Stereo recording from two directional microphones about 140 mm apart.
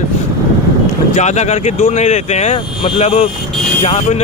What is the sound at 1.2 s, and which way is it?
Speech, 55° left (ahead or behind).